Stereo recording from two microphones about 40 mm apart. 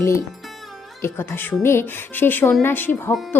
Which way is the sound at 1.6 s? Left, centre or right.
Left.